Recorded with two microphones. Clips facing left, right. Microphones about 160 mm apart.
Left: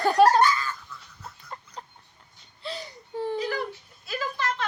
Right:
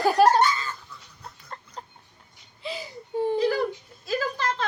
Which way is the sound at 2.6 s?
10° right (ahead or behind).